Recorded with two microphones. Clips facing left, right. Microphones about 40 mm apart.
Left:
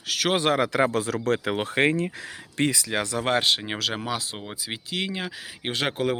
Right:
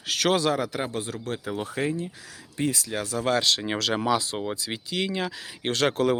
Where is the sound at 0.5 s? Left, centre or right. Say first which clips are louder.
Left 6 dB; left.